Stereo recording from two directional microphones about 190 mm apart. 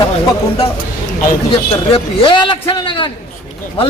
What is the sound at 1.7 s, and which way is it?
Speech, 25° left (ahead or behind).